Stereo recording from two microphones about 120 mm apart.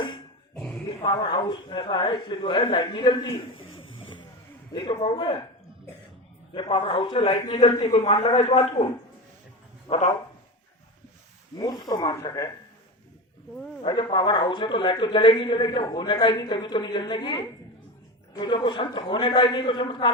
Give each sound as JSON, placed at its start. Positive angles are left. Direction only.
{"t": 1.0, "sound": "a man's voice", "side_deg": 40}
{"t": 6.5, "sound": "a man's voice", "side_deg": 45}
{"t": 7.9, "sound": "speech", "side_deg": 50}
{"t": 8.4, "sound": "a man's voice", "side_deg": 55}
{"t": 9.9, "sound": "a man's voice", "side_deg": 60}
{"t": 11.5, "sound": "a man's voice", "side_deg": 35}
{"t": 13.8, "sound": "a man's voice", "side_deg": 40}